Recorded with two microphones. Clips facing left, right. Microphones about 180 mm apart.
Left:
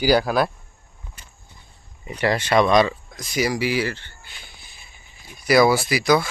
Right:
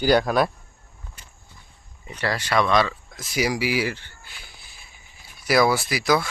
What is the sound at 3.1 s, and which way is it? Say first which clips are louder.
Speech: left 1 dB; 5° right (ahead or behind).